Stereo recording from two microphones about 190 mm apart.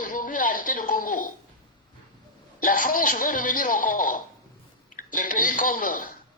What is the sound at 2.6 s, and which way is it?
A man's voice, 45° left (ahead or behind).